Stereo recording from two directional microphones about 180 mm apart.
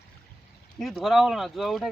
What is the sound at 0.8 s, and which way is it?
Speech, centre (ahead or behind).